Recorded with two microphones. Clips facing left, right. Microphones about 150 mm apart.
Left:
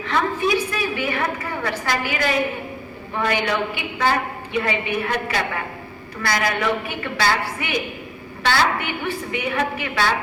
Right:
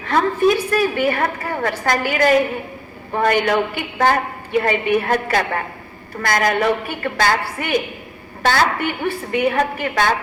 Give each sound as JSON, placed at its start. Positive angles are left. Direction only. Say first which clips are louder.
{"t": 0.0, "sound": "a woman's voice", "louder": "right 5 dB", "side_deg": -45}